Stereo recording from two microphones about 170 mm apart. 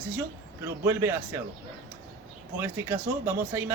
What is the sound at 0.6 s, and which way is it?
Speech, 15° right (ahead or behind).